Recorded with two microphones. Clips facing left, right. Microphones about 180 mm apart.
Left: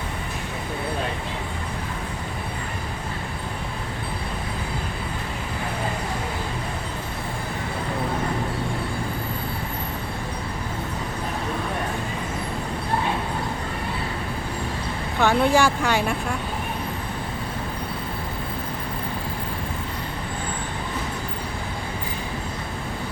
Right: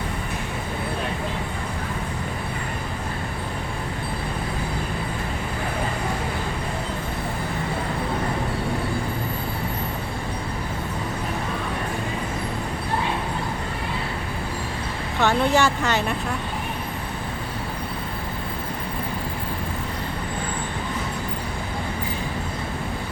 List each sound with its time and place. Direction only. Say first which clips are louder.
15.2 s speech: left 1 dB; 10° left (ahead or behind)